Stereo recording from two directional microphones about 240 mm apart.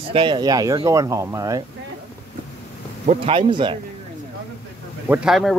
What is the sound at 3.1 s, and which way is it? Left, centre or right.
Speech, right.